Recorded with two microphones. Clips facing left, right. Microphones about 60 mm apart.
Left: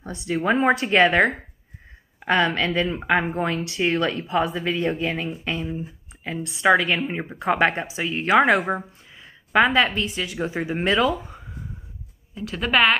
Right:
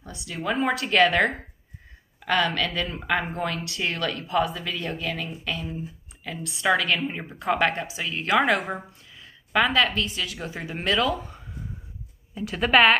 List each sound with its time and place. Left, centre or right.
0.0 s speech: left; by 11.4 s centre
12.4 s a woman's voice: centre